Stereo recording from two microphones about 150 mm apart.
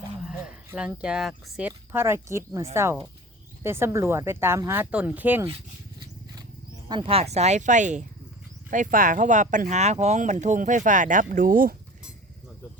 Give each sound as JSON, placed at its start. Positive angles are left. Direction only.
{"t": 0.3, "sound": "a sound", "side_deg": -10}
{"t": 1.0, "sound": "speech", "side_deg": -5}
{"t": 6.8, "sound": "speech", "side_deg": -30}